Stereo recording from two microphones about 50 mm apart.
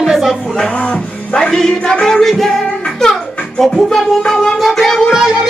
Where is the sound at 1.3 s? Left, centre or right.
Centre.